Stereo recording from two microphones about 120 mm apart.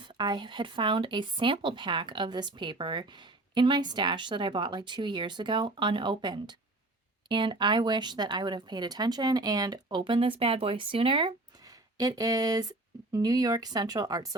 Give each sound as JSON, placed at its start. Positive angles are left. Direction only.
{"t": 0.0, "sound": "speech", "side_deg": -40}
{"t": 11.6, "sound": "speech", "side_deg": -30}